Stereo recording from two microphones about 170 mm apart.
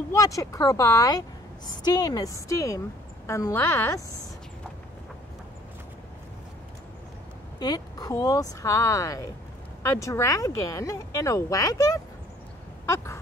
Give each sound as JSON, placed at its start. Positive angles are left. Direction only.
{"t": 0.1, "sound": "a woman's voice", "side_deg": 20}
{"t": 7.5, "sound": "speech", "side_deg": 25}
{"t": 12.8, "sound": "a sound", "side_deg": 15}